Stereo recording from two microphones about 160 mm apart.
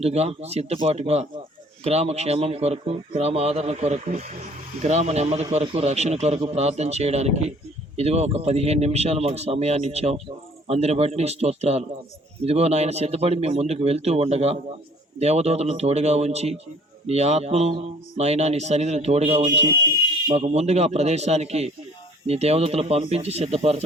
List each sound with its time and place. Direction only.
0.0 s a man's voice: 40° right (ahead or behind)